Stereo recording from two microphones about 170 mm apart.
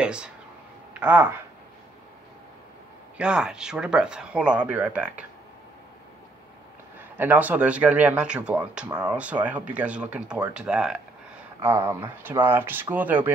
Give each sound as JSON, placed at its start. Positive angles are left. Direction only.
{"t": 0.0, "sound": "speech", "side_deg": -5}
{"t": 3.2, "sound": "speech", "side_deg": -5}
{"t": 7.0, "sound": "speech", "side_deg": -10}
{"t": 11.6, "sound": "speech", "side_deg": -15}